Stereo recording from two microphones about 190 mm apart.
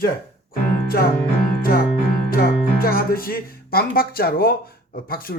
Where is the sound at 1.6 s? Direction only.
50° left (ahead or behind).